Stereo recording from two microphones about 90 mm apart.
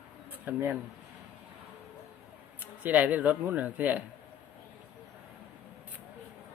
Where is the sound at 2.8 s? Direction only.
20° right (ahead or behind).